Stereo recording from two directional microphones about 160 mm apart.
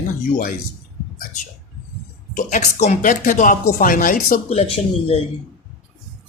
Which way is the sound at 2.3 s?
50° left (ahead or behind).